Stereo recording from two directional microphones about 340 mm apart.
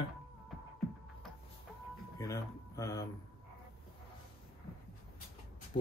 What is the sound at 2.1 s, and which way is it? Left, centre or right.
Speech, centre.